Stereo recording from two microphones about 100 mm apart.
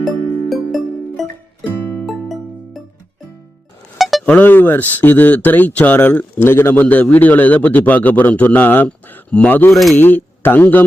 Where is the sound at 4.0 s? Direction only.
Centre (ahead or behind).